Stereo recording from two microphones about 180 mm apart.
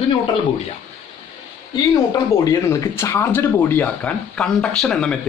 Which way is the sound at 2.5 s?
15° left (ahead or behind).